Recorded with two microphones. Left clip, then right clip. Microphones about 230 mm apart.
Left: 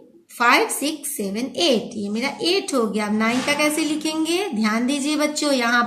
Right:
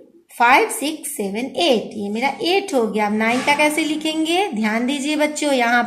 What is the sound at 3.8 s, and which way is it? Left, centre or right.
A woman's voice, left.